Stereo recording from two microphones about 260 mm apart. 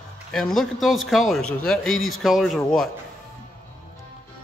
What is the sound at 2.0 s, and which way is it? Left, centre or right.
Speech, left.